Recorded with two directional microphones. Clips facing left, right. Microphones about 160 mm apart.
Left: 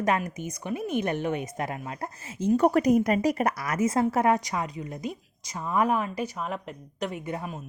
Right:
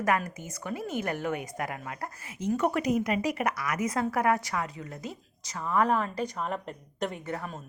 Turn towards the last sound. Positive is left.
turn(degrees=15)  # may be behind; listen again after turning